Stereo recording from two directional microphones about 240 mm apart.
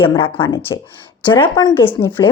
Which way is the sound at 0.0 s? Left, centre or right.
Centre.